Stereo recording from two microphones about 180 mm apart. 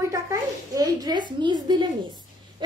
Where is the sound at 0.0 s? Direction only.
15° right (ahead or behind).